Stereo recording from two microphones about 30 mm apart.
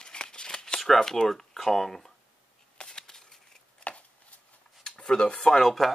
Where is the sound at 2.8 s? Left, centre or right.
Left.